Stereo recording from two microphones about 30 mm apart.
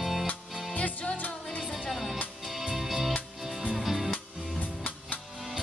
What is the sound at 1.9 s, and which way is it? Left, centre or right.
Music, centre.